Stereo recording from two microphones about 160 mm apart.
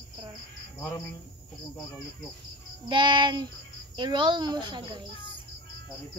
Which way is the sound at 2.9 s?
30° right (ahead or behind).